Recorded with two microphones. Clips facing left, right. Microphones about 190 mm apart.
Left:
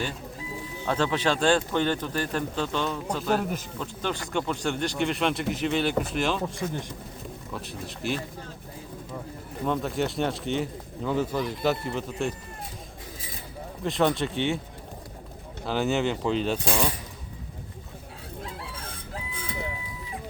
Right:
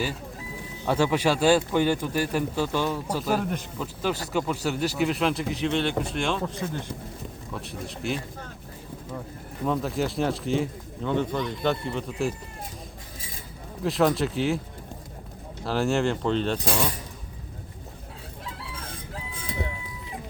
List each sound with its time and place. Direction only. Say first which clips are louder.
0.9 s speech: right 3 dB; 10° right (ahead or behind)
6.4 s speech: even; 15° left (ahead or behind)
7.5 s speech: right 2 dB; centre (ahead or behind)
9.6 s speech: right 1 dB; centre (ahead or behind)
13.8 s speech: right 2 dB; centre (ahead or behind)
15.6 s speech: right 1 dB; centre (ahead or behind)